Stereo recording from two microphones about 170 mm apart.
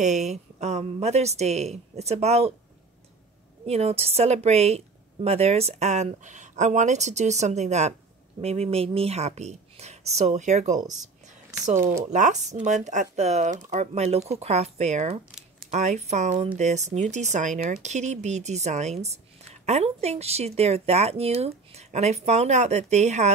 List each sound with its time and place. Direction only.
0.0 s a woman's voice: 45° right (ahead or behind)
3.6 s a woman's voice: 35° right (ahead or behind)
12.1 s a woman's voice: 45° right (ahead or behind)